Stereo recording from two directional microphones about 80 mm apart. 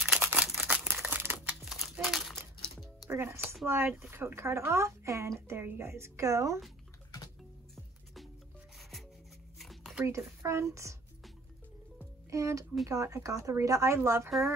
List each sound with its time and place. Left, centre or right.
0.0 s camera: centre
0.7 s crumpling: centre
1.6 s crumpling: centre
2.3 s music: centre
3.1 s speech: right
7.7 s music: centre
9.6 s a sound: centre
10.0 s speech: right
12.3 s speech: right